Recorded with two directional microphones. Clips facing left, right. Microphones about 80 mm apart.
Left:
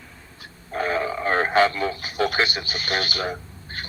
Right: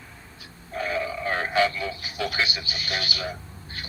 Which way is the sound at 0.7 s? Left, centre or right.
Left.